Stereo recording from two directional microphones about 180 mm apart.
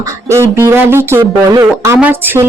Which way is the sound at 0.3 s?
15° right (ahead or behind).